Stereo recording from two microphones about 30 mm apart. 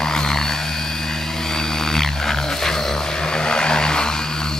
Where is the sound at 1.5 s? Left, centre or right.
Centre.